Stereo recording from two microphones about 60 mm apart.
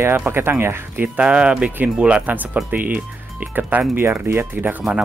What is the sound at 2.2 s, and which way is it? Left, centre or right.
Speech, right.